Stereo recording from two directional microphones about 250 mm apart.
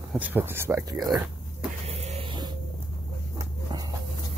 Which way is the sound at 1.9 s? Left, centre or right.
Right.